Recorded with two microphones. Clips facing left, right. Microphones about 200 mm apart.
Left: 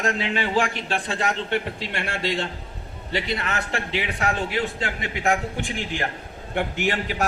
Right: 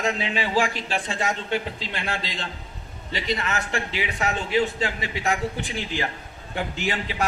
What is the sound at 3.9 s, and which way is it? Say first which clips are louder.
A man's voice: left 3 dB; 55° left (ahead or behind).